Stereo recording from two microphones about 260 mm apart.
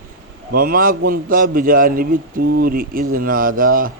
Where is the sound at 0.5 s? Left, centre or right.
Right.